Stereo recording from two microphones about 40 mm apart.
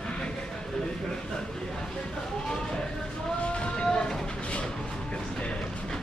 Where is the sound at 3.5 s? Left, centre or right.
Left.